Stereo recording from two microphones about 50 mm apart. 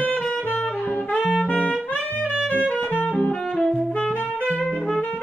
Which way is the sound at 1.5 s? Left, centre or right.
Left.